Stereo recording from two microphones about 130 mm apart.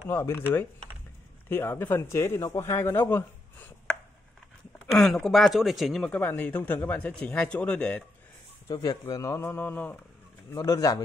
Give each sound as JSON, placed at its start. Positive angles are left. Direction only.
{"t": 0.1, "sound": "a man's voice", "side_deg": 20}
{"t": 4.9, "sound": "speech", "side_deg": 0}
{"t": 8.6, "sound": "a man's voice", "side_deg": 25}